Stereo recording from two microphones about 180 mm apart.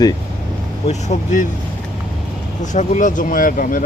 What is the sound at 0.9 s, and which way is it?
Speech, 40° left (ahead or behind).